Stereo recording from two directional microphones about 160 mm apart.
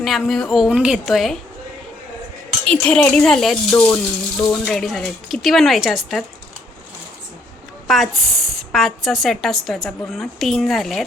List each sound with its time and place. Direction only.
0.0 s speech: centre (ahead or behind)
2.6 s speech: 5° left (ahead or behind)
7.9 s a woman's voice: centre (ahead or behind)